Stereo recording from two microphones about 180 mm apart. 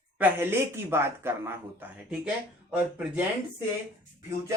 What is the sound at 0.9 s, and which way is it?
Speech, 15° right (ahead or behind).